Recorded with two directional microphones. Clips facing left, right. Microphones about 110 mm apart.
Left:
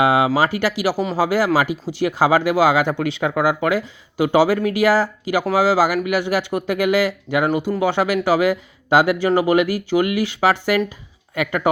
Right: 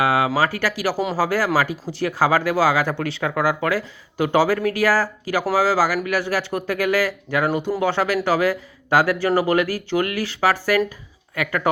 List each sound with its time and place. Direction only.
0.0 s speech: 20° left (ahead or behind)